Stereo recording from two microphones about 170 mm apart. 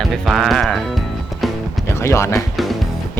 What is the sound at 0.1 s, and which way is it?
Speech, centre (ahead or behind).